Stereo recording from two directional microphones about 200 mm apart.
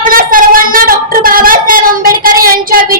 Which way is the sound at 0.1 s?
45° right (ahead or behind).